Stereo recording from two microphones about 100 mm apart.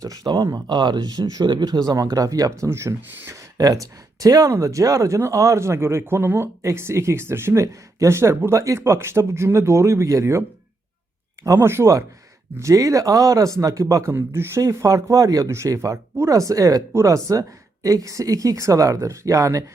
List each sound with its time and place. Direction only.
0.2 s speech: 45° right (ahead or behind)
11.4 s speech: 25° right (ahead or behind)
14.1 s speech: 25° right (ahead or behind)